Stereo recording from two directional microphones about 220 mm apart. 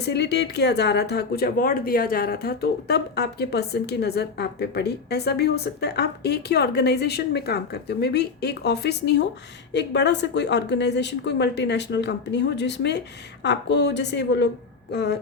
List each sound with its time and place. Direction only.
0.0 s speech: 50° left (ahead or behind)